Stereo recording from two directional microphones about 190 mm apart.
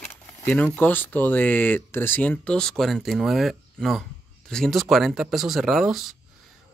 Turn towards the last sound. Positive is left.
turn(degrees=0)  # may be behind; listen again after turning